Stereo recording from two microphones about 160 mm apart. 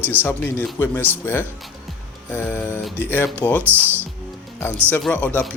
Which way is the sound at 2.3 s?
10° left (ahead or behind).